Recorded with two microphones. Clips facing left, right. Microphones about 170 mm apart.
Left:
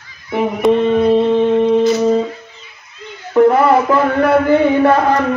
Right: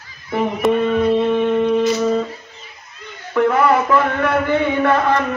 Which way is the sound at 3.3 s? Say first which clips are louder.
Left 5 dB; 35° left (ahead or behind).